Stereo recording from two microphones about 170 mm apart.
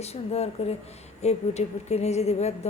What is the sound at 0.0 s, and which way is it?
A woman's voice, 35° left (ahead or behind).